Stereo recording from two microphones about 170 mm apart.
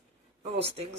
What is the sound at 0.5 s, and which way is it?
Speech, 35° right (ahead or behind).